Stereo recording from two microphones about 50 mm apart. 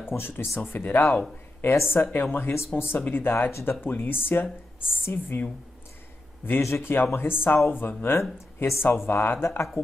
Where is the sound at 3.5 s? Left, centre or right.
Left.